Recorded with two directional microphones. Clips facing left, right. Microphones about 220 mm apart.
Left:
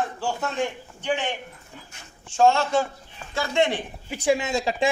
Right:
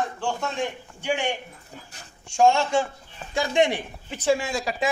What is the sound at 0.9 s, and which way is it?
Speech, 10° right (ahead or behind).